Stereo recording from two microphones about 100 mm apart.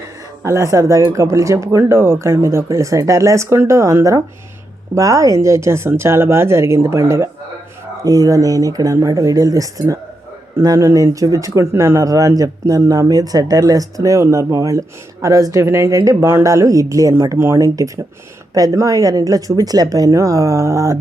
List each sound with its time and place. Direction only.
0.4 s speech: 30° right (ahead or behind)